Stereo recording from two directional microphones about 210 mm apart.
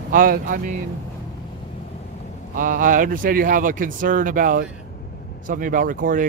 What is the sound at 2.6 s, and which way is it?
Speech, 40° right (ahead or behind).